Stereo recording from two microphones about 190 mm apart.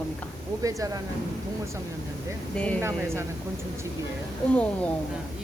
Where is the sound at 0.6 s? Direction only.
15° right (ahead or behind).